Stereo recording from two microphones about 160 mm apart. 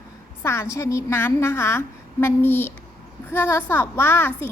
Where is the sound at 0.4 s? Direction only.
15° left (ahead or behind).